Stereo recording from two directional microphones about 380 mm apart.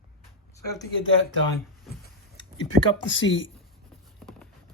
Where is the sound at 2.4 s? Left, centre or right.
Centre.